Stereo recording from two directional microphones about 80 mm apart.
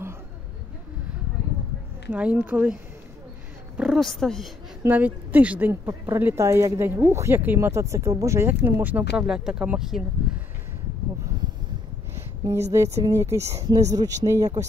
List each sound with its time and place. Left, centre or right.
2.0 s speech: centre
3.7 s a woman's voice: centre
4.0 s speech: centre
4.8 s speech: right
5.7 s speech: right
9.2 s speech: centre
12.2 s speech: right
13.7 s speech: right